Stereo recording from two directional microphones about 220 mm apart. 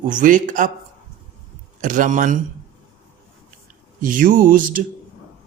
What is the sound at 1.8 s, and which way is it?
Speech, 35° right (ahead or behind).